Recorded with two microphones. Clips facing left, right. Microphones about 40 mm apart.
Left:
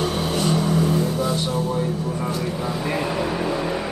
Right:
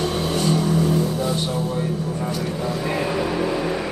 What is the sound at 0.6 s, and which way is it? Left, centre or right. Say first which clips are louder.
Vehicle: even; centre.